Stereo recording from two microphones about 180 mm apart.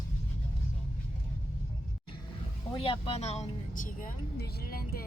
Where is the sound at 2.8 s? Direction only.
30° left (ahead or behind); by 5.0 s 55° left (ahead or behind).